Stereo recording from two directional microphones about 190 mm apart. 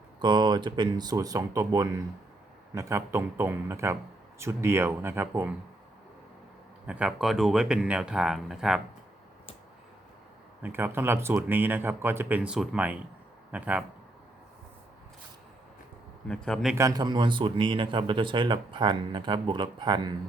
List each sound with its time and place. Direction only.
0.2 s a man's voice: 25° right (ahead or behind)
6.8 s speech: 5° right (ahead or behind)
10.6 s a man's voice: 10° right (ahead or behind)
16.3 s speech: 5° left (ahead or behind)
16.7 s speech: 20° right (ahead or behind)